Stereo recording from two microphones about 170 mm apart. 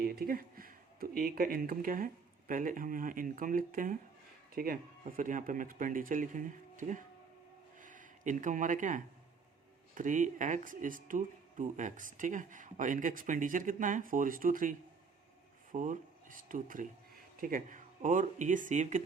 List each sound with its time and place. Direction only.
0.0 s speech: 60° right (ahead or behind)
7.8 s a sound: 50° right (ahead or behind)
9.9 s speech: 50° right (ahead or behind)